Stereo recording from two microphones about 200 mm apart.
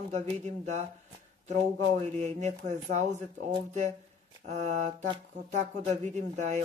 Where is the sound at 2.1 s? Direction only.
35° right (ahead or behind).